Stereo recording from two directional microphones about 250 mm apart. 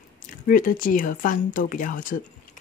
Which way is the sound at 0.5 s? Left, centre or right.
Left.